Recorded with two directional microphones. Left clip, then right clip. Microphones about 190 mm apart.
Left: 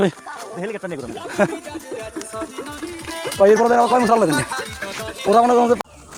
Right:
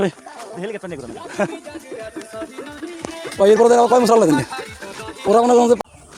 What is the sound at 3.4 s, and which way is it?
Speech, 35° right (ahead or behind).